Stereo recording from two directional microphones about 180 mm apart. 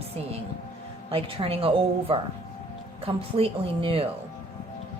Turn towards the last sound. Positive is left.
turn(degrees=-30)  # may be behind; listen again after turning